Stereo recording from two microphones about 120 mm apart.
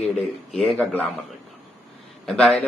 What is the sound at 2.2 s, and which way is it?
Speech, 5° left (ahead or behind).